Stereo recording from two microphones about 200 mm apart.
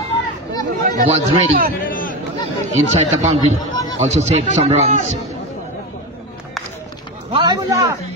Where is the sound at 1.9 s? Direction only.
45° left (ahead or behind).